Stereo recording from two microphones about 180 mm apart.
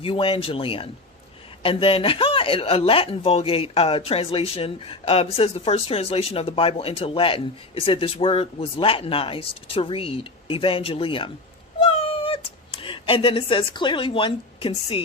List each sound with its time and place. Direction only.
0.0 s speech: 30° left (ahead or behind)
11.8 s cat: 30° left (ahead or behind)